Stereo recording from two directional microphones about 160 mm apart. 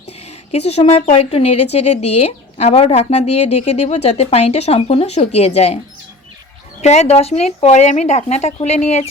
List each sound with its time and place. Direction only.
0.5 s a woman's voice: 40° left (ahead or behind)
6.8 s speech: 45° left (ahead or behind)